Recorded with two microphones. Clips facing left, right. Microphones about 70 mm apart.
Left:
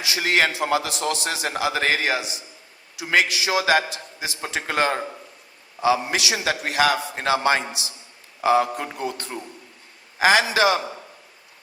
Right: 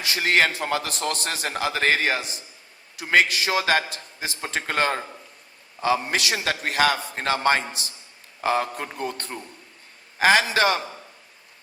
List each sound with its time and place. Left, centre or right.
0.0 s a man's voice: right